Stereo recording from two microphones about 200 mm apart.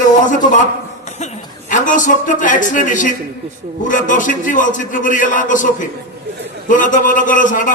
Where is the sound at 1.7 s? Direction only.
40° left (ahead or behind).